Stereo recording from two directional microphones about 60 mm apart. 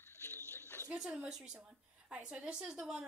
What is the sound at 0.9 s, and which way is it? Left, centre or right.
A woman's voice, centre.